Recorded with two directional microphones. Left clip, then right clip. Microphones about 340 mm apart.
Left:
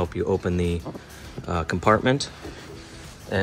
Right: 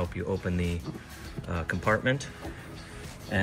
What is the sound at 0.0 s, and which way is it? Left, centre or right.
Speech, centre.